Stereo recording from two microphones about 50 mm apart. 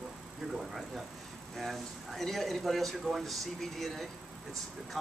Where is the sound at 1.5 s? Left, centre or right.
Centre.